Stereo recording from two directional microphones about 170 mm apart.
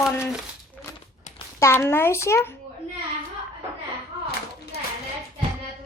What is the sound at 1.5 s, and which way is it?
A child's voice, 15° left (ahead or behind).